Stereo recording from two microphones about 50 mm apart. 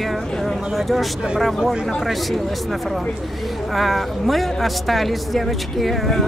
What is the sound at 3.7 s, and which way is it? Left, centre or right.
A man's voice, centre.